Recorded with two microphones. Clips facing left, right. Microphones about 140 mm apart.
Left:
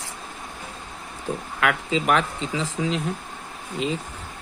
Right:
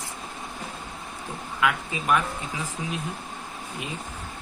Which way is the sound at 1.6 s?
85° left.